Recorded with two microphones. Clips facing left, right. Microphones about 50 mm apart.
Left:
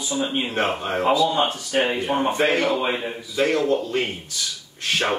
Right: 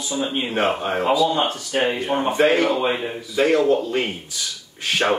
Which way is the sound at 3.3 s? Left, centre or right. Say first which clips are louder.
Right 3 dB; centre.